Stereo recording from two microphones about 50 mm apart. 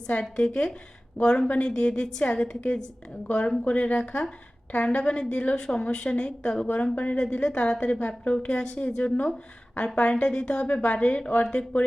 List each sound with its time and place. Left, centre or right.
0.1 s a woman's voice: centre
5.5 s a woman's voice: centre
5.8 s a woman's voice: left
7.2 s a woman's voice: centre
7.9 s a woman's voice: left